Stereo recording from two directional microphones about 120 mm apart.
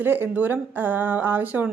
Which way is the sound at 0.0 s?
15° right (ahead or behind).